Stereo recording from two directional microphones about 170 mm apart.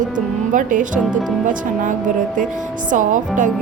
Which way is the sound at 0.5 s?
50° right (ahead or behind).